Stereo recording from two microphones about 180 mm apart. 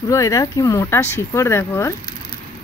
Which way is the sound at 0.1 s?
20° left (ahead or behind).